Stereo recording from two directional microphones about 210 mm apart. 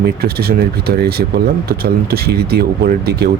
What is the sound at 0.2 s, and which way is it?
Speech, 45° right (ahead or behind).